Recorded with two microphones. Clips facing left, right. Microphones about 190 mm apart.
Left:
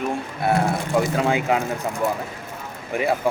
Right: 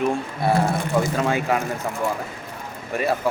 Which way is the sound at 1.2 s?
15° left (ahead or behind).